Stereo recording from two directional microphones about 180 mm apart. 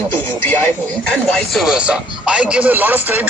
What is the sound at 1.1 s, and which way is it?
Speech, centre (ahead or behind).